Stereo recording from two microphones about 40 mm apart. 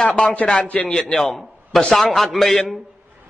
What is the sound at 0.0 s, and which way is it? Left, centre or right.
Speech, centre.